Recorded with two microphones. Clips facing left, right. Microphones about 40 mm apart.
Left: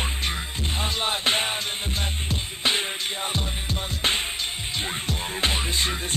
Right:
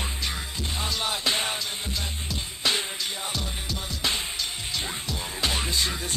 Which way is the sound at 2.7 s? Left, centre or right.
Left.